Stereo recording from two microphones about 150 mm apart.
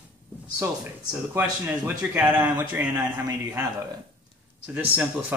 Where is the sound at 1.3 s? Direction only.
10° right (ahead or behind).